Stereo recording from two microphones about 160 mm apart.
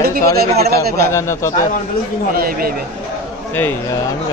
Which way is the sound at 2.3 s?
65° right (ahead or behind).